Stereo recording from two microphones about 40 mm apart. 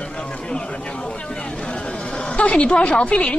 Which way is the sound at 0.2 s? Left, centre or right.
Left.